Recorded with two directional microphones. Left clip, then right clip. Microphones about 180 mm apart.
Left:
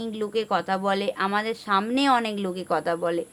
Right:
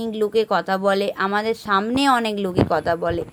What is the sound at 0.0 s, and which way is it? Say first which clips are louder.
Speech: right 7 dB; 25° right (ahead or behind).